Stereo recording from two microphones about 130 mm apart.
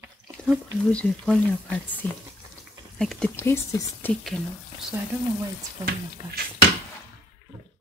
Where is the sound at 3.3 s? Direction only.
20° left (ahead or behind).